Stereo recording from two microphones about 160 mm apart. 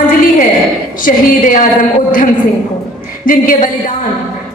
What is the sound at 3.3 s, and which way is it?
Speech, 60° left (ahead or behind).